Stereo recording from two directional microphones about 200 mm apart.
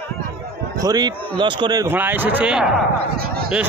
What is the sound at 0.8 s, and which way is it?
A man's voice, 20° right (ahead or behind).